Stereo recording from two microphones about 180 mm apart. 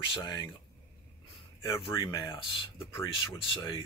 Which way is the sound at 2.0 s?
25° left (ahead or behind).